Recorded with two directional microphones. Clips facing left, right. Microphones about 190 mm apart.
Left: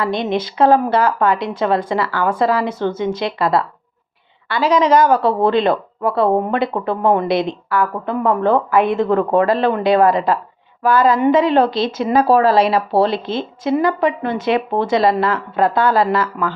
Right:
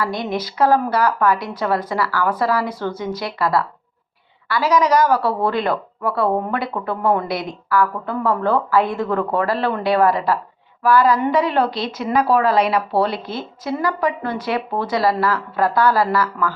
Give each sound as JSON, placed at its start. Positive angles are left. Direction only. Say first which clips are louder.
{"t": 0.0, "sound": "speech", "louder": "left 4 dB", "side_deg": 25}